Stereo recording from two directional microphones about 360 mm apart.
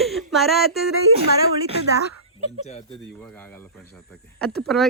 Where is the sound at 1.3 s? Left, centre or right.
Left.